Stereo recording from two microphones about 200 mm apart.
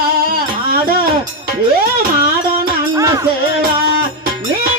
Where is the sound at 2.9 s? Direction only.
15° right (ahead or behind).